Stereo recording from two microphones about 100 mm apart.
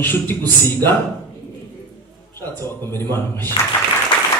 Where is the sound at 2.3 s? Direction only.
25° left (ahead or behind).